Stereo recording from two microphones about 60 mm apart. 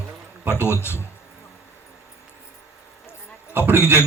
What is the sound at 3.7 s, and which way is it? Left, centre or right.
Speech, left.